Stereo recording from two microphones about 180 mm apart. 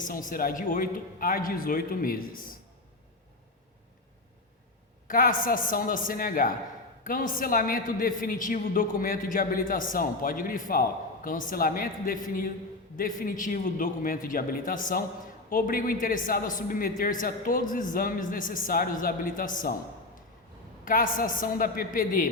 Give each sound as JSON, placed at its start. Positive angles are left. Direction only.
{"t": 0.0, "sound": "a man's voice", "side_deg": 50}
{"t": 5.0, "sound": "a man's voice", "side_deg": 50}
{"t": 20.8, "sound": "a man's voice", "side_deg": 50}